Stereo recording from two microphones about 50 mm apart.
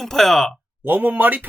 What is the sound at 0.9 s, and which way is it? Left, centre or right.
Speech, right.